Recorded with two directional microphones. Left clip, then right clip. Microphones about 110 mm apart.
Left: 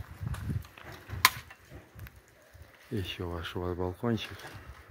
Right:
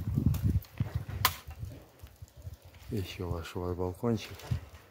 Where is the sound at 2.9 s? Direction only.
Centre (ahead or behind).